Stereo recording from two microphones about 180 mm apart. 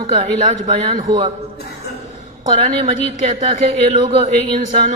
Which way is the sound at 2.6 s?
30° right (ahead or behind).